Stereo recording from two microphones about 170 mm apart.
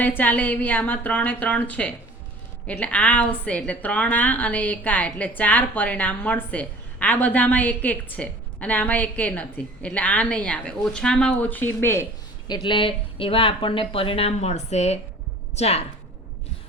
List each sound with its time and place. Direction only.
0.0 s a woman's voice: 10° left (ahead or behind)
12.5 s speech: 30° left (ahead or behind)